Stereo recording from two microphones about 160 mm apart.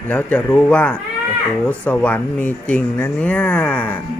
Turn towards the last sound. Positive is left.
turn(degrees=10)  # may be behind; listen again after turning